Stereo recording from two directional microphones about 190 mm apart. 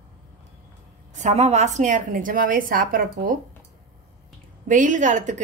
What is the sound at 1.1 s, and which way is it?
A woman's voice, 35° right (ahead or behind).